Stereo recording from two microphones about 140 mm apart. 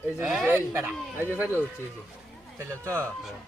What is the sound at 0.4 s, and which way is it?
Speech, 15° right (ahead or behind).